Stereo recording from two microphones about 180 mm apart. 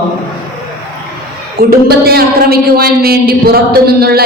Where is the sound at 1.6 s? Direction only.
55° right (ahead or behind).